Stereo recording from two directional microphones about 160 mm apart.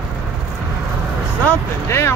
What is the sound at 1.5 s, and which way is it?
Speech, 15° left (ahead or behind).